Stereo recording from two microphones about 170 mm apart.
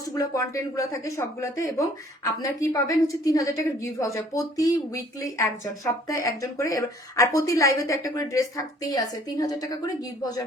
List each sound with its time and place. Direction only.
0.0 s a woman's voice: 20° left (ahead or behind)